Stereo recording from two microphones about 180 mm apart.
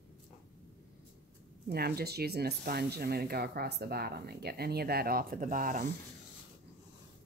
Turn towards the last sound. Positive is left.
turn(degrees=-45)  # may be behind; listen again after turning